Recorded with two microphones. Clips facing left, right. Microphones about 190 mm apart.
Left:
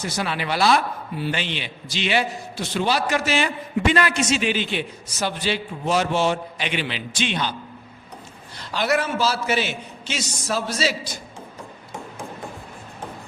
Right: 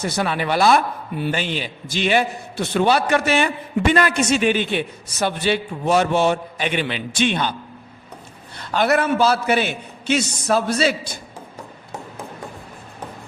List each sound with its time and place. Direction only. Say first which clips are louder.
0.1 s a man's voice: right 4 dB; 55° right (ahead or behind)
8.5 s a man's voice: right 4 dB; 55° right (ahead or behind)